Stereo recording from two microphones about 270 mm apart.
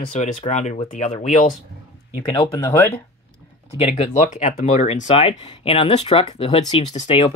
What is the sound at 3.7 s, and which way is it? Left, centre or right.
Speech, left.